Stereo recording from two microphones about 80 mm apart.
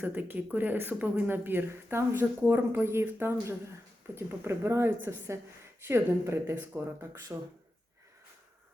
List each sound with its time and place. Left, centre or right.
0.0 s speech: right